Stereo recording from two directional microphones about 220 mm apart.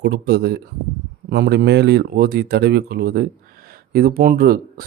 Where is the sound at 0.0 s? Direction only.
50° right (ahead or behind).